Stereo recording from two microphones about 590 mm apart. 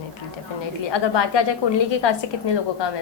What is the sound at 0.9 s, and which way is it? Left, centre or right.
Speech, left.